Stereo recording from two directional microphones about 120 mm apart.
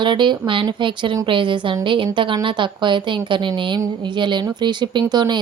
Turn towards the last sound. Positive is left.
turn(degrees=-35)  # may be behind; listen again after turning